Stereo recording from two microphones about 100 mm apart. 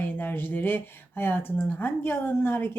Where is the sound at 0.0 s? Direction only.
20° left (ahead or behind).